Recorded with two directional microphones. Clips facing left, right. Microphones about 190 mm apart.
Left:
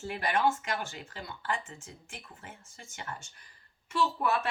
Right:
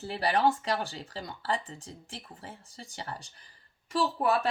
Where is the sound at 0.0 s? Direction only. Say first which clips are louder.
Right 2 dB; 35° right (ahead or behind).